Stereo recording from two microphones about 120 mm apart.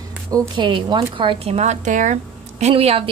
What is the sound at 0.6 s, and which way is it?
Speech, 45° right (ahead or behind).